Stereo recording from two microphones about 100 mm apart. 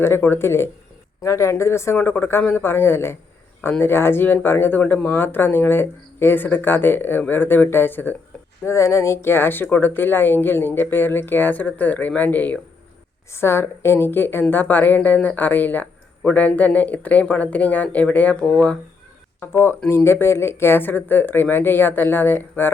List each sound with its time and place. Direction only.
0.0 s speech: 20° left (ahead or behind)
19.4 s speech: 25° left (ahead or behind)